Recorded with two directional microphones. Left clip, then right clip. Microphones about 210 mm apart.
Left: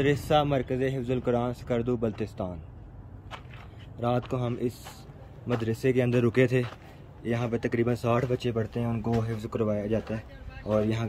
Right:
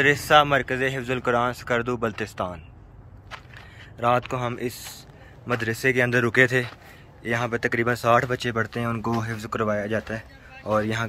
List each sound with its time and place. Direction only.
0.0 s speech: centre (ahead or behind)
4.0 s speech: centre (ahead or behind)
8.8 s speech: 35° right (ahead or behind)
9.4 s speech: centre (ahead or behind)